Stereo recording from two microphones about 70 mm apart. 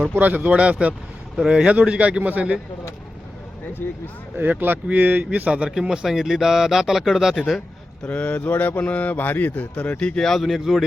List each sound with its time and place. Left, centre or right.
0.2 s speech: right
3.8 s speech: left
4.4 s speech: right; by 7.6 s centre
8.0 s speech: centre